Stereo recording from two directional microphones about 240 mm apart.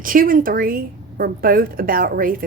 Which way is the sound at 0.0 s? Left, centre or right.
Right.